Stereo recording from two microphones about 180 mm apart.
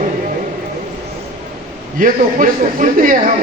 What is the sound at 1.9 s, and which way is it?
A man's voice, 50° right (ahead or behind).